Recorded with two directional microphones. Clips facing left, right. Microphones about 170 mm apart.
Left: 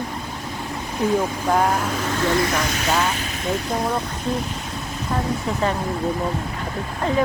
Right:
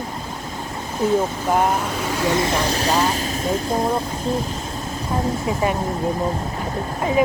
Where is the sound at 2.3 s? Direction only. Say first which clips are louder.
Right 2 dB; 25° right (ahead or behind).